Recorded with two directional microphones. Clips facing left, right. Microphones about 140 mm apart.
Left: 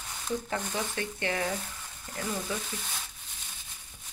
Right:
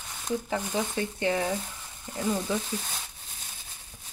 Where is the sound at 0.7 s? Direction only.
20° right (ahead or behind).